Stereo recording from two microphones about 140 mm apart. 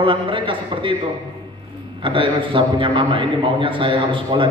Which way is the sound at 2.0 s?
35° right (ahead or behind).